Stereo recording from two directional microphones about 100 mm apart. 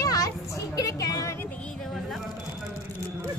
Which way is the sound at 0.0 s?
35° left (ahead or behind).